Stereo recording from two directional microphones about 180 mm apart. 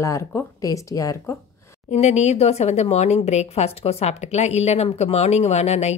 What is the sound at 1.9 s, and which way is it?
A woman's voice, 40° left (ahead or behind).